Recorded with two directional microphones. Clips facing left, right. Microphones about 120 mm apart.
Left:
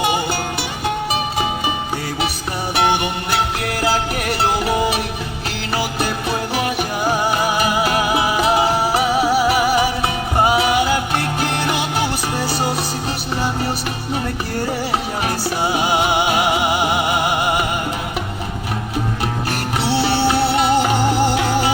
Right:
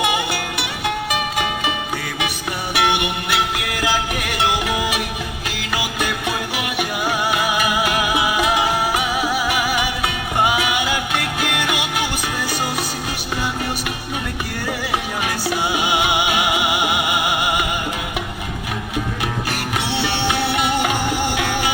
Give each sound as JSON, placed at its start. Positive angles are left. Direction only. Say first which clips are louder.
{"t": 0.0, "sound": "music", "louder": "left 2 dB", "side_deg": 35}
{"t": 2.7, "sound": "music", "louder": "left 2 dB", "side_deg": 35}
{"t": 15.2, "sound": "music", "louder": "left 2 dB", "side_deg": 35}
{"t": 19.8, "sound": "music", "louder": "left 7 dB", "side_deg": 30}